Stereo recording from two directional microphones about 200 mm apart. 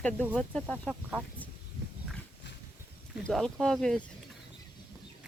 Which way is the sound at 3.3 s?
Centre (ahead or behind).